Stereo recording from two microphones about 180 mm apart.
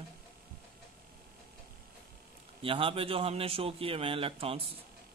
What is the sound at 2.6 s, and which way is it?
A man's voice, 30° right (ahead or behind).